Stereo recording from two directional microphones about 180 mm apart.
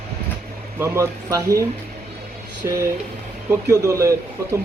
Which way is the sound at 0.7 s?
15° right (ahead or behind).